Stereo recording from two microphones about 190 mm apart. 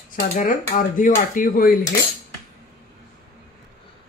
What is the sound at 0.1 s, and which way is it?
Speech, 45° left (ahead or behind).